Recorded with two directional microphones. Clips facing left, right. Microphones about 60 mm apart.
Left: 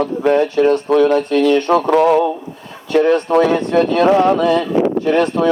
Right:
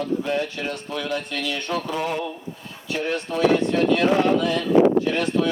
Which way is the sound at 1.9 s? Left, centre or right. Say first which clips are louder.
Left 14 dB; left.